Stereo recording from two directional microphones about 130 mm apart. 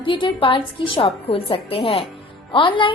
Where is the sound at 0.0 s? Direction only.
40° left (ahead or behind).